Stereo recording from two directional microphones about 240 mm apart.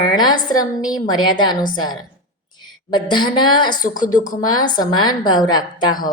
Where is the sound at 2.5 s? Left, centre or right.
Centre.